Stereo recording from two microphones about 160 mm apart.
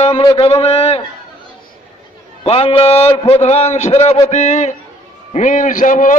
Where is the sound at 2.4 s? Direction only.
35° left (ahead or behind).